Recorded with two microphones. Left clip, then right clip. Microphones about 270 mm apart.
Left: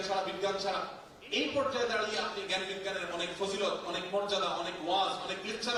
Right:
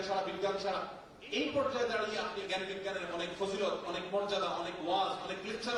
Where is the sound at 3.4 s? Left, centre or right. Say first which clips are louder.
Left 1 dB; right.